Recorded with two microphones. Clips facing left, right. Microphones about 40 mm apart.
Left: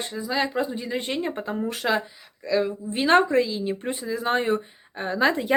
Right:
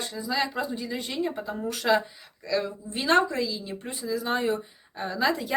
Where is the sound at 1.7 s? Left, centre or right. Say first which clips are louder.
Right 4 dB; left.